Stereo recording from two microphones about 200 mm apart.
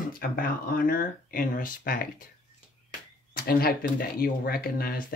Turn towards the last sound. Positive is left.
turn(degrees=50)  # may be behind; listen again after turning